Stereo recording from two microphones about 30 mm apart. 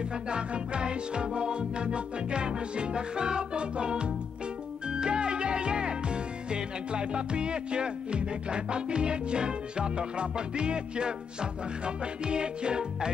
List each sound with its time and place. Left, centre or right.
0.3 s music: right